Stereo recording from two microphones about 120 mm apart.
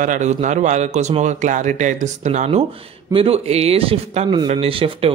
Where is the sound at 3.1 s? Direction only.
55° right (ahead or behind).